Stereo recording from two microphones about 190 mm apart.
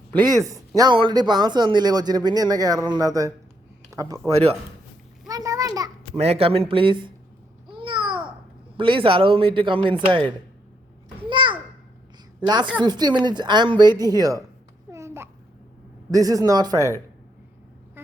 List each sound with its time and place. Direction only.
0.3 s speech: 15° right (ahead or behind)
5.3 s a sound: 20° right (ahead or behind)
6.1 s speech: 30° right (ahead or behind)
7.7 s babbling: 25° right (ahead or behind)
8.8 s speech: 25° right (ahead or behind)
11.2 s a sound: 25° right (ahead or behind)
12.4 s a woman's voice: 20° right (ahead or behind)
14.8 s babbling: 15° right (ahead or behind)
16.1 s speech: 20° right (ahead or behind)